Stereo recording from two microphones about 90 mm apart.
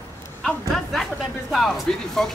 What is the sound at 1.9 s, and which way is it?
Speech, 10° left (ahead or behind).